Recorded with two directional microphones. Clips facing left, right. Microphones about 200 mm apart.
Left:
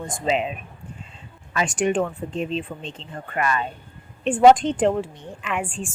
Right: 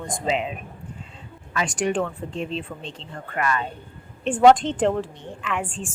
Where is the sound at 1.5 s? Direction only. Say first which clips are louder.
Left 2 dB; 20° left (ahead or behind).